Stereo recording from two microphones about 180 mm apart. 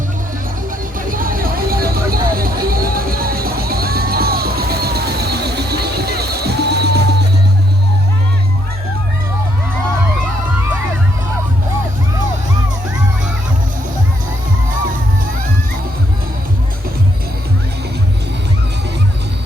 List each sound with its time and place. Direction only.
0.9 s vehicle: 50° right (ahead or behind)